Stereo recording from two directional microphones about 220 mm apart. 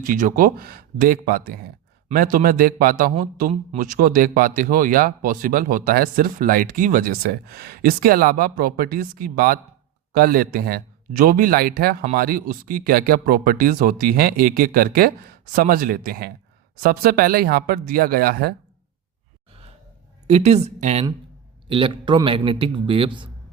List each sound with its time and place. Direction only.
0.0 s a man's voice: 40° right (ahead or behind)
20.2 s a man's voice: 30° right (ahead or behind)